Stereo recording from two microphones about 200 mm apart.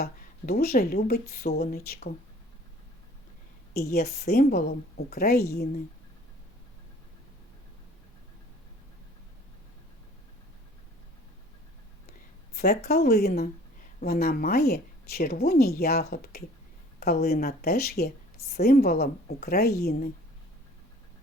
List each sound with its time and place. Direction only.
0.0 s speech: 50° left (ahead or behind)
3.9 s speech: 50° left (ahead or behind)
12.5 s speech: 50° left (ahead or behind)